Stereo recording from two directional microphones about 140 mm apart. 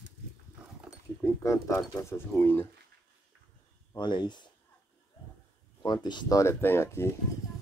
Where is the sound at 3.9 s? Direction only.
30° left (ahead or behind).